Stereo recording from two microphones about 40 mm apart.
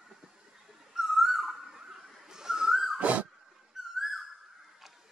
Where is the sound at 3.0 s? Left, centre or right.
Right.